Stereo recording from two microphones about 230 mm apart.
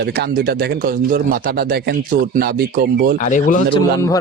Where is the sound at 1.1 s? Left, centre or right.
Right.